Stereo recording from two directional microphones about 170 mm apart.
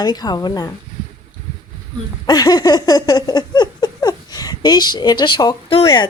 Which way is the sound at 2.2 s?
20° left (ahead or behind).